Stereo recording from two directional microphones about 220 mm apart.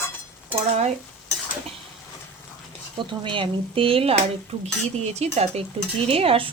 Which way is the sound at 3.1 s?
20° right (ahead or behind).